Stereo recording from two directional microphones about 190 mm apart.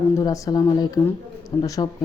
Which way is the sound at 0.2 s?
20° left (ahead or behind).